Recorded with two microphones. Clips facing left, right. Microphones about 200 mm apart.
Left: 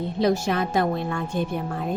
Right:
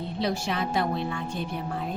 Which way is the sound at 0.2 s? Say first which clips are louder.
Left 6 dB; 45° left (ahead or behind).